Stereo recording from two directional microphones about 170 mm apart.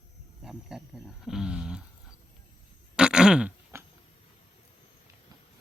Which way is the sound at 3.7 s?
15° right (ahead or behind).